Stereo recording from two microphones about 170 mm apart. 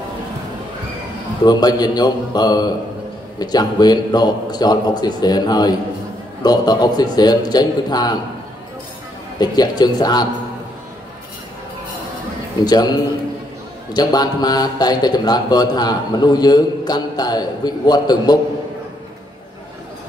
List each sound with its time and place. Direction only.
1.4 s a man's voice: 25° left (ahead or behind)
9.4 s a man's voice: 25° left (ahead or behind)
12.6 s a man's voice: 25° left (ahead or behind)
13.9 s a man's voice: 25° left (ahead or behind)